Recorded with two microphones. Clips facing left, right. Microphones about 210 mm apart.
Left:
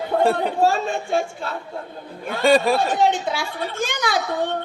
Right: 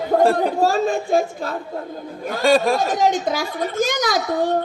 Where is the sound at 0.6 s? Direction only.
40° right (ahead or behind).